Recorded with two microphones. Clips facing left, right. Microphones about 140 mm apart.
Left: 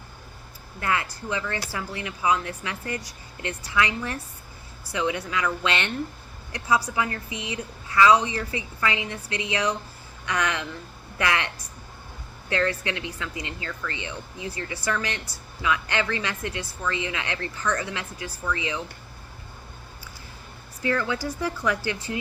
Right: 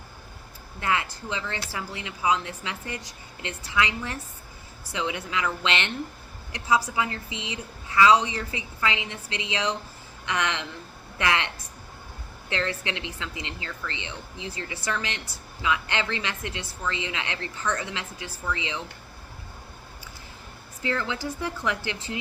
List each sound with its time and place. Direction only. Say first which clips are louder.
0.8 s speech: even; 25° right (ahead or behind)
20.8 s speech: left 3 dB; 20° right (ahead or behind)